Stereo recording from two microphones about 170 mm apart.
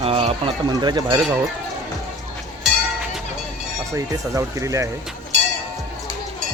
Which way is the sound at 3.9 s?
20° right (ahead or behind).